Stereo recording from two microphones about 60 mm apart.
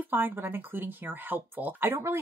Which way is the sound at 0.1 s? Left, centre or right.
Right.